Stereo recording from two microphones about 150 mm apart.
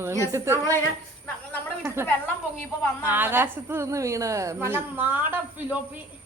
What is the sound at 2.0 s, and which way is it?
A woman's voice, 15° right (ahead or behind).